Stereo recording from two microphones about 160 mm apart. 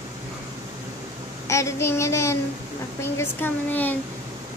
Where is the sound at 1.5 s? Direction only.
20° left (ahead or behind).